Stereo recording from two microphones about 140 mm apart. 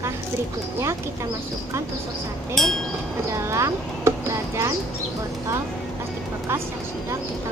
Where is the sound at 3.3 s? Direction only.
20° right (ahead or behind).